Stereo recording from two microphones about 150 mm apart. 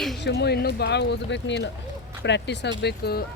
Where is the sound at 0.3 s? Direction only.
90° left.